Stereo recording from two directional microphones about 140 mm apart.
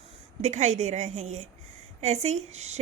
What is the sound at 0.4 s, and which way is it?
A woman's voice, 55° right (ahead or behind).